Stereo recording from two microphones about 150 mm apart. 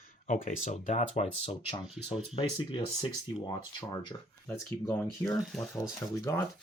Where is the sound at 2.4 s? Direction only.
35° left (ahead or behind).